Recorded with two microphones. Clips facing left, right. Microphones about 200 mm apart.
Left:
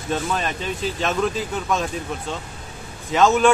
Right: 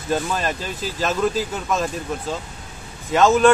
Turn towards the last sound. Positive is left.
turn(degrees=0)  # may be behind; listen again after turning